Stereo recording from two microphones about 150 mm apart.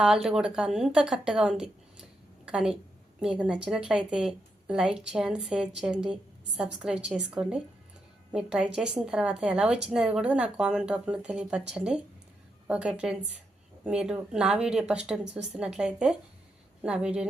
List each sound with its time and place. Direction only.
0.0 s a woman's voice: 5° right (ahead or behind)